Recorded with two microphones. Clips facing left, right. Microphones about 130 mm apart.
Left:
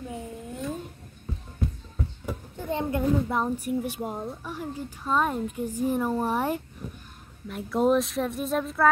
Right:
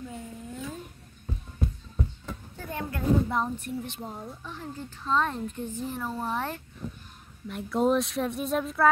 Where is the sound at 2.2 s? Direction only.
20° left (ahead or behind).